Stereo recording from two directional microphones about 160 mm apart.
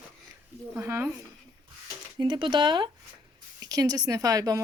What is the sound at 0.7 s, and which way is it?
Speech, 10° right (ahead or behind).